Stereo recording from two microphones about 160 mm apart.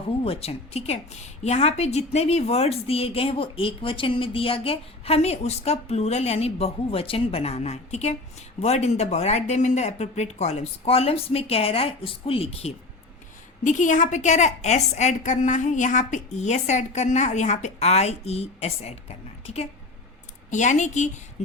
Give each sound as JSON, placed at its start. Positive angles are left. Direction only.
{"t": 0.3, "sound": "a woman's voice", "side_deg": 40}
{"t": 13.7, "sound": "a woman's voice", "side_deg": 50}